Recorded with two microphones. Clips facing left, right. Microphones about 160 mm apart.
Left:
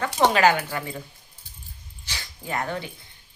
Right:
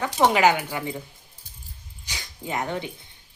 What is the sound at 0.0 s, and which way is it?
Speech, 15° right (ahead or behind).